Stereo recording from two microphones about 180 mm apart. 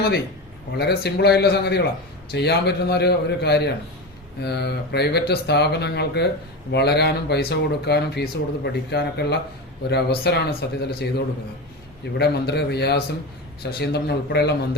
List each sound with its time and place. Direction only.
0.8 s a man's voice: 65° left (ahead or behind)
12.1 s a man's voice: 65° left (ahead or behind)